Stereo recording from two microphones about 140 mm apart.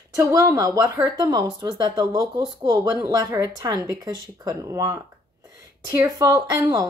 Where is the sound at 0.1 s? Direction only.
25° right (ahead or behind).